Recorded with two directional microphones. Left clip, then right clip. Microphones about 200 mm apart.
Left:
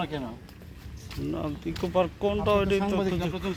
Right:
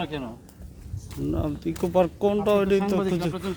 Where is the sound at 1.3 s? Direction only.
30° right (ahead or behind).